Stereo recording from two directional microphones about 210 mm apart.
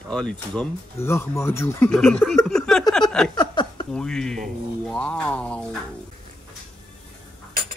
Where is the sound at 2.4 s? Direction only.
Centre (ahead or behind).